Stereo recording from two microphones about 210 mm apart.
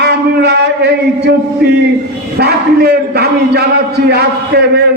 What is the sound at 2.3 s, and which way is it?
A man's voice, 50° right (ahead or behind).